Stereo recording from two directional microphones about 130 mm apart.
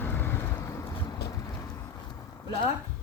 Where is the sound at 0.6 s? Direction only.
20° left (ahead or behind).